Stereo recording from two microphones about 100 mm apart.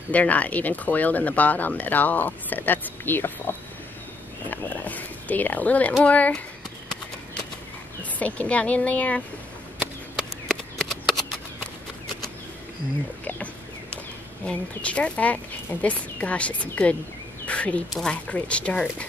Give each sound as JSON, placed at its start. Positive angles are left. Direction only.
{"t": 0.1, "sound": "speech", "side_deg": 15}
{"t": 8.0, "sound": "speech", "side_deg": 15}
{"t": 10.5, "sound": "shuffling cards", "side_deg": 0}
{"t": 13.2, "sound": "speech", "side_deg": 15}